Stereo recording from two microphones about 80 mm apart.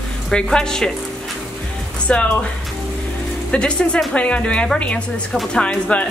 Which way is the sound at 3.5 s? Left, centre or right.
Centre.